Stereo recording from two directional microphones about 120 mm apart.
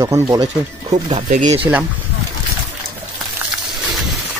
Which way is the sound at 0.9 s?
80° right.